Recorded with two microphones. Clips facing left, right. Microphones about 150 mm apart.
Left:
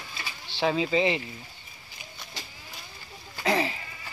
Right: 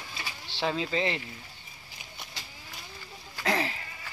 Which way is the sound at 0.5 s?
5° left (ahead or behind).